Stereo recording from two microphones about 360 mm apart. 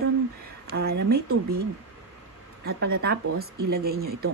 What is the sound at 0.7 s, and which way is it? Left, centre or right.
Speech, right.